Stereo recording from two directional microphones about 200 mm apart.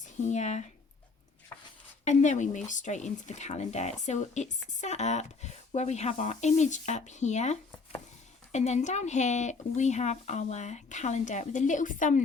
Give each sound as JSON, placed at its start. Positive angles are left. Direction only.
{"t": 0.0, "sound": "speech", "side_deg": 35}
{"t": 1.5, "sound": "a sound", "side_deg": 15}
{"t": 2.0, "sound": "speech", "side_deg": 35}